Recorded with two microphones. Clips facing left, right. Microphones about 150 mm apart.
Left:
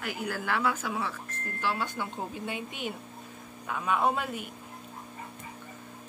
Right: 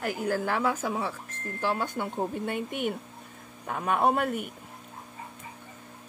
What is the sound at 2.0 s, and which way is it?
A man's voice, 55° right (ahead or behind).